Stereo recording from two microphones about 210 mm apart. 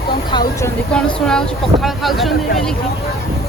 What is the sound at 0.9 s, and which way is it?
Speech, 5° left (ahead or behind).